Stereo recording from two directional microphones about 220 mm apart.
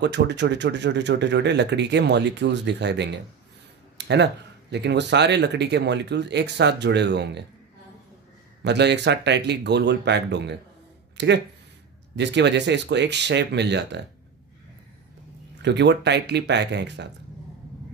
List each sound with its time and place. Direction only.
0.0 s speech: 50° right (ahead or behind)
8.6 s speech: 50° right (ahead or behind)
15.6 s speech: 50° right (ahead or behind)